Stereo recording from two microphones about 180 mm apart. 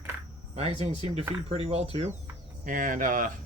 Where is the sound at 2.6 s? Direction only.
50° right (ahead or behind).